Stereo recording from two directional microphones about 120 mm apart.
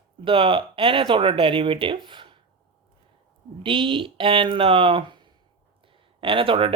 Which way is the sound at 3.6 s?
45° right (ahead or behind).